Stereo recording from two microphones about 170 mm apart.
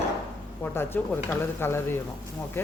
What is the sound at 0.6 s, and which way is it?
Speech, 10° left (ahead or behind).